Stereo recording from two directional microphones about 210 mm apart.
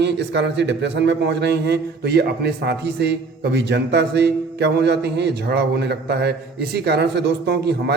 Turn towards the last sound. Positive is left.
turn(degrees=-50)  # may be behind; listen again after turning